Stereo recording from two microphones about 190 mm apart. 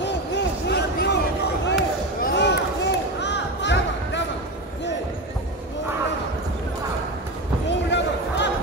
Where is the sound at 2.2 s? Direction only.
65° left (ahead or behind).